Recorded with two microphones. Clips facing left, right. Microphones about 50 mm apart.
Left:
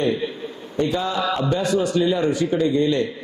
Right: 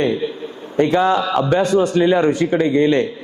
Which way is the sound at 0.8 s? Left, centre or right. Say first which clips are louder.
Right 7 dB; right.